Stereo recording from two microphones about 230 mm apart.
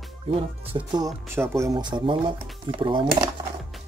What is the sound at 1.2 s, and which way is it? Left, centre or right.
Speech, centre.